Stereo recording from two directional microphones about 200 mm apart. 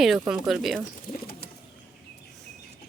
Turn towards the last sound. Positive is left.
turn(degrees=45)  # may be behind; listen again after turning